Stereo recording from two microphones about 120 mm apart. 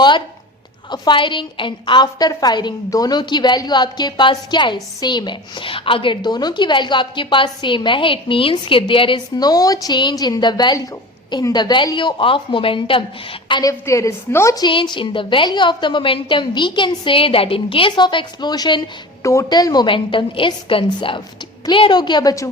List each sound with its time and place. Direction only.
0.9 s a woman's voice: 40° left (ahead or behind)
13.5 s a woman's voice: 30° left (ahead or behind)
14.7 s a woman's voice: 45° left (ahead or behind)
19.2 s a woman's voice: 25° left (ahead or behind)
19.5 s a woman's voice: 35° left (ahead or behind)